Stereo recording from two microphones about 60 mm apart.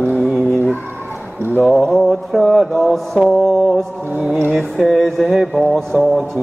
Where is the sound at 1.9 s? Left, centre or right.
Centre.